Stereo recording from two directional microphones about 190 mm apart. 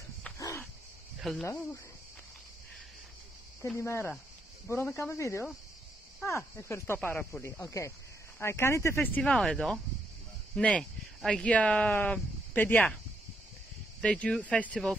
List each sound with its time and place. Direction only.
0.4 s dog: 15° left (ahead or behind)
1.2 s speech: centre (ahead or behind)
3.6 s speech: 15° left (ahead or behind)
14.0 s speech: 5° left (ahead or behind)